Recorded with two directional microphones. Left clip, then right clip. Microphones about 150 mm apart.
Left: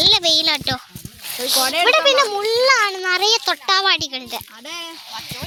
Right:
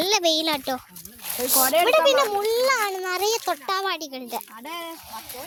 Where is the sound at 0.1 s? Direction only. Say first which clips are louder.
Left 6 dB; 30° right (ahead or behind).